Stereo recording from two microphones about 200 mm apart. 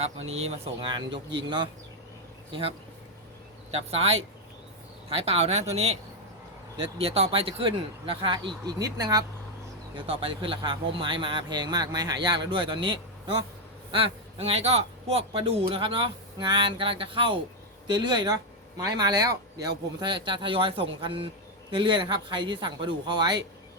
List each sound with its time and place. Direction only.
0.3 s speech: 30° right (ahead or behind)